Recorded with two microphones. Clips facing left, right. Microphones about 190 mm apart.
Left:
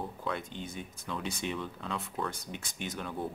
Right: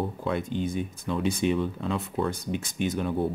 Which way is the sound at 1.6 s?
25° right (ahead or behind).